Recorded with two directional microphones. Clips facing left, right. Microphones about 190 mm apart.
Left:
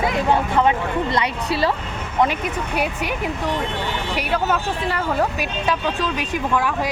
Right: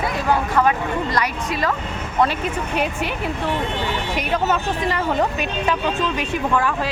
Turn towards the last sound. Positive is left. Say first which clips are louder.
# right 1 dB
turn(degrees=10)  # may be behind; listen again after turning